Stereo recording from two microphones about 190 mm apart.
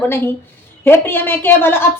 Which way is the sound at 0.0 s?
10° left (ahead or behind).